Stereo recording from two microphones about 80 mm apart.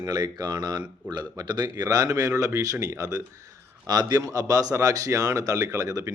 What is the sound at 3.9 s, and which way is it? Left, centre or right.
Speech, right.